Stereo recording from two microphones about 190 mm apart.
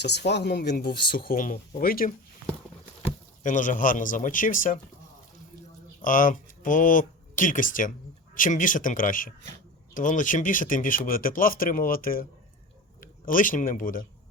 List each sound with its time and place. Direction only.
0.0 s speech: 60° left (ahead or behind)
3.4 s speech: 40° left (ahead or behind)
6.0 s a man's voice: 45° left (ahead or behind)